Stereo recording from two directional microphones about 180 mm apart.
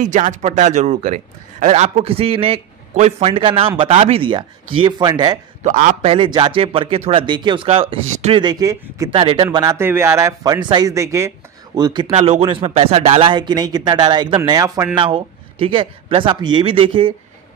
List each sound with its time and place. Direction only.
0.0 s speech: 45° right (ahead or behind); by 5.4 s 25° right (ahead or behind)
5.6 s a man's voice: 45° right (ahead or behind)
6.0 s speech: 30° right (ahead or behind)
9.1 s speech: 30° right (ahead or behind)